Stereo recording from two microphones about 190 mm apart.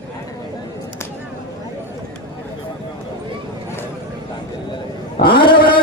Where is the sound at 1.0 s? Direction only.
15° left (ahead or behind).